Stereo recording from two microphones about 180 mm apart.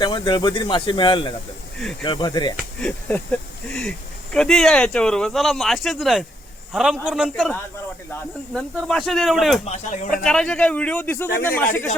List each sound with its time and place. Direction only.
0.0 s speech: 25° left (ahead or behind)
2.8 s speech: 5° left (ahead or behind)
8.9 s speech: centre (ahead or behind)
9.6 s speech: 40° left (ahead or behind)
10.2 s a man's voice: 5° left (ahead or behind)